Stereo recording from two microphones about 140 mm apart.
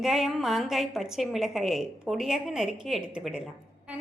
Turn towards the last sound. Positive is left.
turn(degrees=-5)  # may be behind; listen again after turning